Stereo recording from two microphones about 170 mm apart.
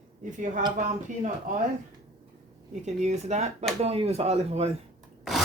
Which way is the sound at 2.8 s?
40° right (ahead or behind).